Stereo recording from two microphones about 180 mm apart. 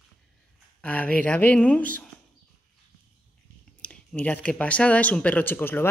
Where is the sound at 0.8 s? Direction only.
5° left (ahead or behind).